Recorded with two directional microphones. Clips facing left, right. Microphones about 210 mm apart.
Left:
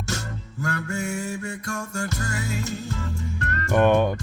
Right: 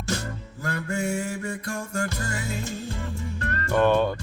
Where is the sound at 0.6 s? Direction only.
35° right (ahead or behind).